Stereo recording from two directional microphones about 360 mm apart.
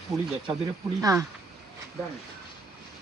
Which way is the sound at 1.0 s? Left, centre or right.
Centre.